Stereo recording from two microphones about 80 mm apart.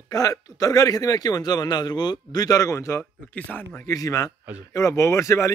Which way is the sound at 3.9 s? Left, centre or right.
Left.